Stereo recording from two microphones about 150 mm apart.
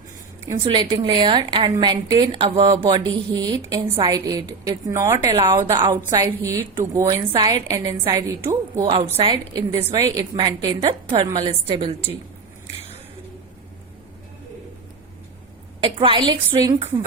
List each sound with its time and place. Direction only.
0.6 s a woman's voice: 35° right (ahead or behind)
5.7 s a woman's voice: 30° right (ahead or behind)
6.1 s a woman's voice: 20° right (ahead or behind)
9.1 s a woman's voice: 35° right (ahead or behind)
15.8 s a woman's voice: 35° right (ahead or behind)